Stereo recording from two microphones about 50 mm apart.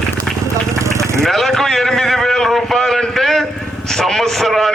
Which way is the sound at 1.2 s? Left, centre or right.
Centre.